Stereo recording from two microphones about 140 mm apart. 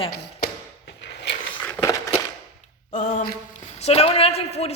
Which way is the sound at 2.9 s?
65° left (ahead or behind).